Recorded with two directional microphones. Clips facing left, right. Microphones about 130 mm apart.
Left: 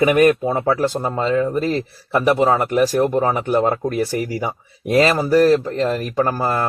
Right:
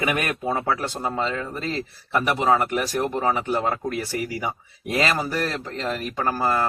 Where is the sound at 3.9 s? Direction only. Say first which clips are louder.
Left 6 dB; 40° left (ahead or behind).